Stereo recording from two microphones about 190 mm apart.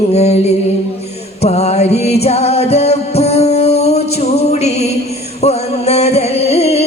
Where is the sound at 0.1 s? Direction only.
35° left (ahead or behind).